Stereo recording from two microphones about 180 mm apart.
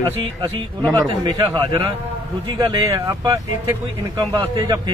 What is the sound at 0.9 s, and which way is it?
A man's voice, 20° right (ahead or behind).